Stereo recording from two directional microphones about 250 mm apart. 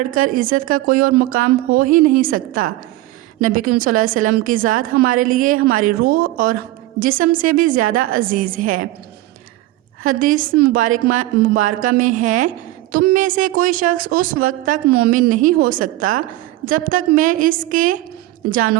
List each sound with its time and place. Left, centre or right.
0.1 s a woman's voice: right
3.8 s a woman's voice: right
10.0 s a woman's voice: right